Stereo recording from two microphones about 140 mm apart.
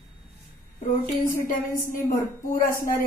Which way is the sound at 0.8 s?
75° left (ahead or behind).